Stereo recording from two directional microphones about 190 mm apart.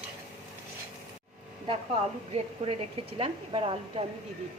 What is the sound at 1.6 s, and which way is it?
A woman's voice, 30° right (ahead or behind).